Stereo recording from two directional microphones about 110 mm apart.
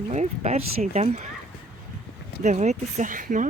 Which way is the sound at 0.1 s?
90° right.